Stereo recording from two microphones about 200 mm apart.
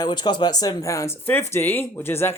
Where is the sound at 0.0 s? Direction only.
20° left (ahead or behind).